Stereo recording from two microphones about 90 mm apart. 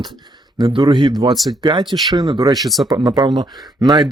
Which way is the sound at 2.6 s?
Centre (ahead or behind).